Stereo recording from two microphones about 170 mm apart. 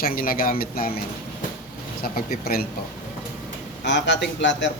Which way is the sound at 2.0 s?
60° left (ahead or behind).